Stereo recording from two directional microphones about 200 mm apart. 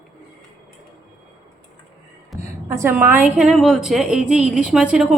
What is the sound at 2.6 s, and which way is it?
A woman's voice, 10° right (ahead or behind).